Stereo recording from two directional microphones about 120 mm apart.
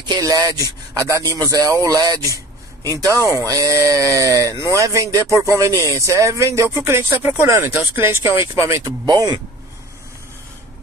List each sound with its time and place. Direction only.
0.1 s speech: 30° right (ahead or behind)